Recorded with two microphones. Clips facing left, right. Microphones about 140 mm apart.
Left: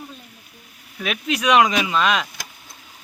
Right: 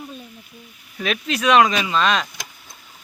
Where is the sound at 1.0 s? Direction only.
10° left (ahead or behind).